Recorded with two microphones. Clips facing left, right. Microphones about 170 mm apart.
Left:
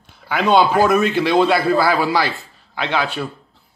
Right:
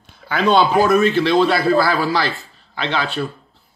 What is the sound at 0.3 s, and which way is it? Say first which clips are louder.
A man's voice: even; 10° left (ahead or behind).